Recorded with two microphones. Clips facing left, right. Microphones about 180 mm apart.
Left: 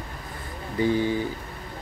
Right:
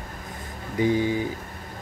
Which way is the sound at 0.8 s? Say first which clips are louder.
Right 1 dB; 15° right (ahead or behind).